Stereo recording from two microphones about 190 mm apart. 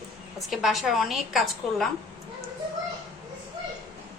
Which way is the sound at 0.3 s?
Centre (ahead or behind).